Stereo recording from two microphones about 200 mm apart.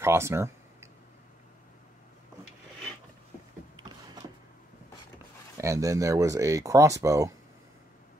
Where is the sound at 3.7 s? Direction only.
20° right (ahead or behind).